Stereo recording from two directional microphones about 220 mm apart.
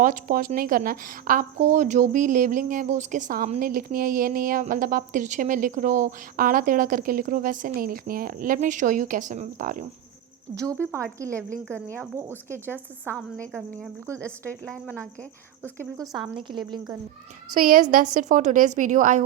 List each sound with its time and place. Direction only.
0.0 s speech: 35° right (ahead or behind)
10.9 s speech: 15° right (ahead or behind)
13.1 s a woman's voice: 5° left (ahead or behind)
15.6 s a woman's voice: 10° right (ahead or behind)
16.4 s a woman's voice: 20° right (ahead or behind)
17.5 s speech: 35° right (ahead or behind)